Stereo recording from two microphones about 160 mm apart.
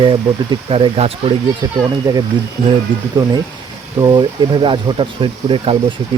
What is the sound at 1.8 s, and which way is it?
Speech, 20° right (ahead or behind).